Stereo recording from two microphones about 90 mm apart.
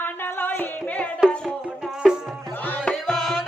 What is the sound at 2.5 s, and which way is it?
Music, 20° left (ahead or behind).